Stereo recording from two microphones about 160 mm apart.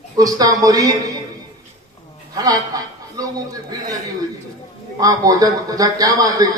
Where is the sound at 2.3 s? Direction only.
20° right (ahead or behind).